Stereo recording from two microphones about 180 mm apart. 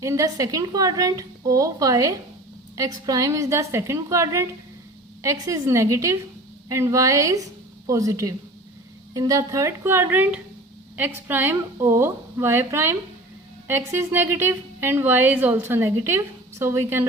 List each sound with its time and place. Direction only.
0.0 s a woman's voice: 15° right (ahead or behind)